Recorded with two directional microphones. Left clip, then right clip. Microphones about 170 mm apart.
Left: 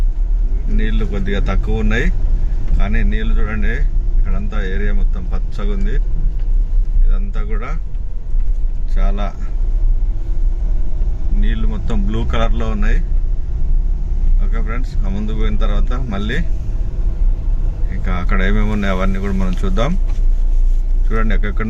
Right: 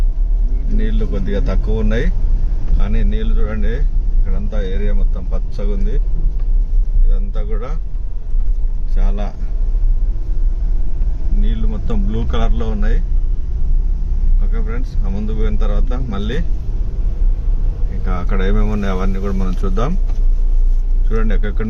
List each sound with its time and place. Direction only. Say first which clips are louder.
0.8 s speech: left 1 dB; 10° left (ahead or behind)
7.1 s speech: right 1 dB; 10° left (ahead or behind)
9.0 s speech: left 3 dB; 5° left (ahead or behind)
11.3 s speech: left 1 dB; 5° left (ahead or behind)
14.5 s speech: left 2 dB; 5° left (ahead or behind)
18.0 s speech: left 2 dB; centre (ahead or behind)
21.1 s speech: left 1 dB; 10° left (ahead or behind)